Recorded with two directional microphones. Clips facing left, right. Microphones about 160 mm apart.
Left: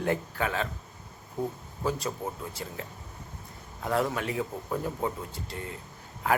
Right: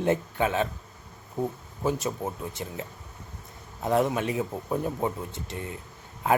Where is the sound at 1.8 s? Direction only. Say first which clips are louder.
Right 3 dB; 20° right (ahead or behind).